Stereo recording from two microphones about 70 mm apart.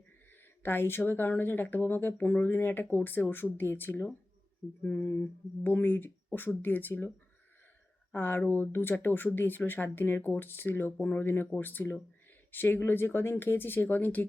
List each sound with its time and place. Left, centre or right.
0.6 s speech: left
8.1 s speech: left